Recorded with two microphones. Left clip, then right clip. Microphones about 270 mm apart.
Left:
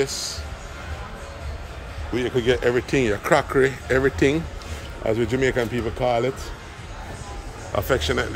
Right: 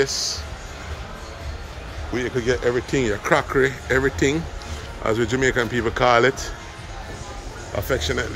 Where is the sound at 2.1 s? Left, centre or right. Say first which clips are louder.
Left 1 dB; centre.